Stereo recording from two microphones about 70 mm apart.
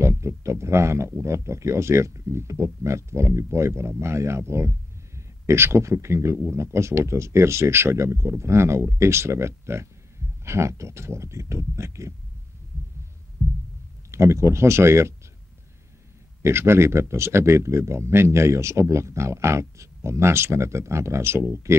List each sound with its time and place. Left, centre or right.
0.0 s speech: right
13.4 s heart sounds: centre
14.1 s speech: right
16.4 s speech: right